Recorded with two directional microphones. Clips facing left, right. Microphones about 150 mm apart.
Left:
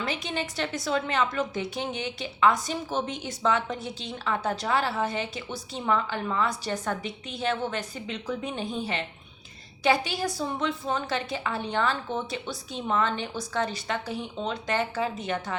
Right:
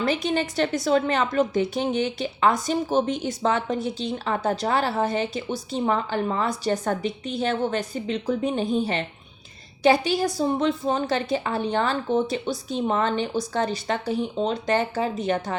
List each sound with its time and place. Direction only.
0.0 s a woman's voice: 40° right (ahead or behind)